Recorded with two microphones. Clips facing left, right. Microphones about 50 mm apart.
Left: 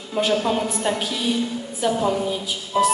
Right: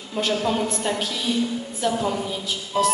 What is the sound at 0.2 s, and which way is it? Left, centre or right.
A woman's voice, centre.